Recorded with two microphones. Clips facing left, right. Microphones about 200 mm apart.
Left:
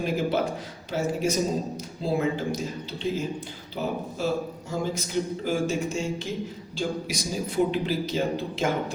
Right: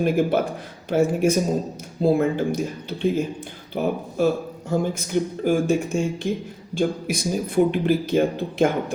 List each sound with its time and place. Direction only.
0.0 s speech: 55° right (ahead or behind)